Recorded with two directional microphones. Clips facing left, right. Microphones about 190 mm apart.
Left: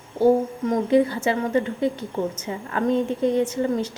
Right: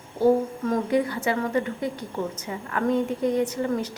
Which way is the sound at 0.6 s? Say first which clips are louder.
Left 5 dB; 20° left (ahead or behind).